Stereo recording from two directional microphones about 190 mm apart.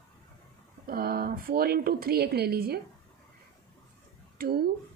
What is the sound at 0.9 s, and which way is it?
A woman's voice, 50° right (ahead or behind).